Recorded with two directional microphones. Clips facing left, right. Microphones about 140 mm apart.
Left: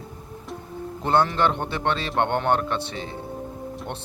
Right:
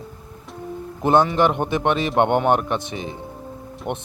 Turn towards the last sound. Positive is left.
turn(degrees=-15)  # may be behind; listen again after turning